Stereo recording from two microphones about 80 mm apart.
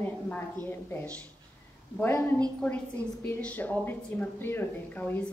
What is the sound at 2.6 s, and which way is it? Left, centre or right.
A woman's voice, centre.